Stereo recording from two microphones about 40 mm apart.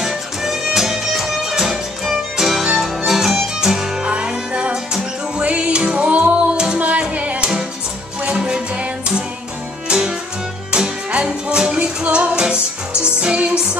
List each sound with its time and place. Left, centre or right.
0.0 s music: centre; by 6.3 s right
6.5 s music: right
6.8 s music: right
8.2 s music: right
12.0 s music: right